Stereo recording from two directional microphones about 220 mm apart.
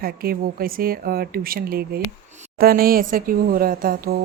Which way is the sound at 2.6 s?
40° right (ahead or behind).